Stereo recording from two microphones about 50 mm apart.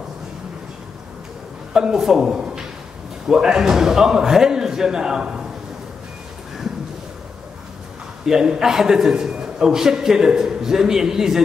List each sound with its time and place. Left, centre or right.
1.7 s a man's voice: centre
8.3 s a man's voice: centre